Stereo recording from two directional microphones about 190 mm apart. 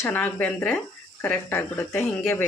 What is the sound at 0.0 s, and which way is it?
Speech, 10° left (ahead or behind).